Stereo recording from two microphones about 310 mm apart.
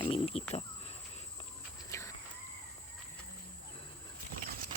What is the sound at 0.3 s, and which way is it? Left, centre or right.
Speech, centre.